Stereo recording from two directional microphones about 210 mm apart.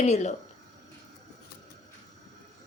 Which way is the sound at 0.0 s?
35° left (ahead or behind).